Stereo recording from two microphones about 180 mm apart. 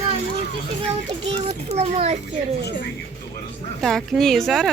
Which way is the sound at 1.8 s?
35° right (ahead or behind).